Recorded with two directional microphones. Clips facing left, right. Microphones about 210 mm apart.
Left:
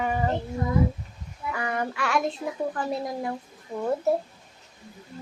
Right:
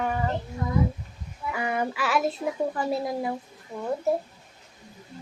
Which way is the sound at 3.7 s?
30° left (ahead or behind).